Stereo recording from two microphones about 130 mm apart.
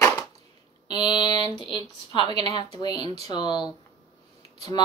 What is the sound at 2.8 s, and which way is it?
Speech, 35° left (ahead or behind).